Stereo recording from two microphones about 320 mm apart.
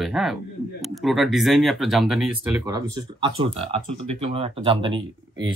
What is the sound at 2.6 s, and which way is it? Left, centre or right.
Speech, centre.